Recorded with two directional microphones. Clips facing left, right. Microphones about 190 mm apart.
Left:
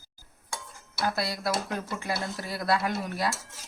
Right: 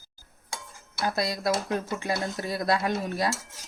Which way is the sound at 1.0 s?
20° right (ahead or behind).